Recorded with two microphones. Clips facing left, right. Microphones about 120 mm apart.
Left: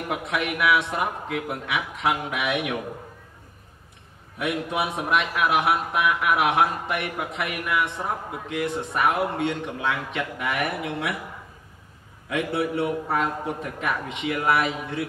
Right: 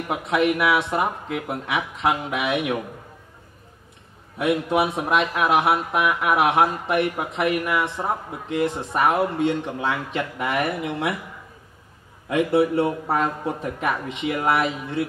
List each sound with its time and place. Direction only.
0.1 s a man's voice: 30° right (ahead or behind)
4.4 s a man's voice: 30° right (ahead or behind)
12.3 s a man's voice: 30° right (ahead or behind)